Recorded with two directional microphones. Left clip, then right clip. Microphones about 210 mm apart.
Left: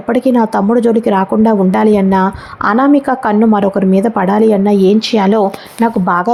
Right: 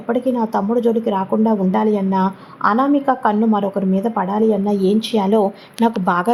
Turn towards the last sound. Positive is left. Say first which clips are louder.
# left 5 dB
turn(degrees=15)  # may be behind; listen again after turning